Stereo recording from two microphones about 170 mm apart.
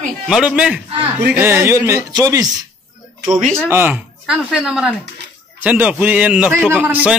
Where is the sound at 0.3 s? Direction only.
5° right (ahead or behind); by 2.5 s 20° right (ahead or behind).